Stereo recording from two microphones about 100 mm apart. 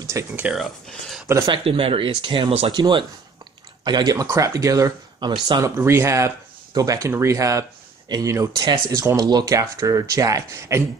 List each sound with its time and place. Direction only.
0.0 s speech: 30° right (ahead or behind)
0.5 s speech: centre (ahead or behind)
1.5 s speech: 65° right (ahead or behind); by 4.9 s 30° right (ahead or behind)
5.2 s speech: 45° right (ahead or behind)
5.6 s speech: 25° right (ahead or behind)